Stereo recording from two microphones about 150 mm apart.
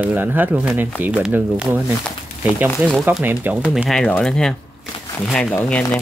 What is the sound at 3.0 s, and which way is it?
Speech, 10° right (ahead or behind).